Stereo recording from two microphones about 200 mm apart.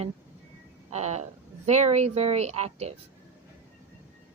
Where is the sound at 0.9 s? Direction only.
35° right (ahead or behind).